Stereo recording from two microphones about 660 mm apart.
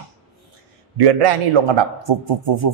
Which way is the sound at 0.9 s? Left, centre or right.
Right.